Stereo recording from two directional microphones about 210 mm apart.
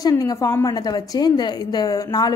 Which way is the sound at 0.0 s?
15° left (ahead or behind).